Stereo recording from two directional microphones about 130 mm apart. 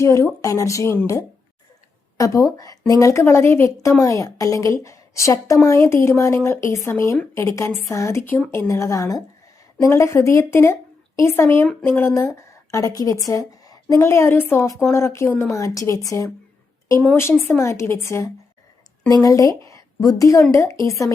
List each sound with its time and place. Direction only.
0.0 s a woman's voice: 25° left (ahead or behind)
17.5 s a woman's voice: 20° left (ahead or behind)